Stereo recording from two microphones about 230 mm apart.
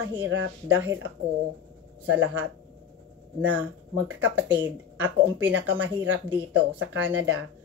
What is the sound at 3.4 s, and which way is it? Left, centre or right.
Speech, centre.